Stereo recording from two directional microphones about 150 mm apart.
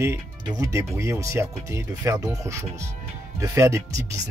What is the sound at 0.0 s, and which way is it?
Speech, 20° right (ahead or behind).